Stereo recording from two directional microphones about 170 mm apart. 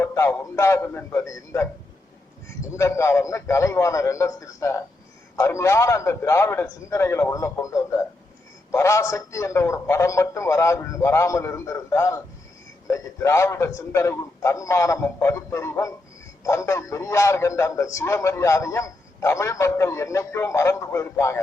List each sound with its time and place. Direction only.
0.0 s a man's voice: 15° left (ahead or behind)
2.7 s a man's voice: 15° left (ahead or behind)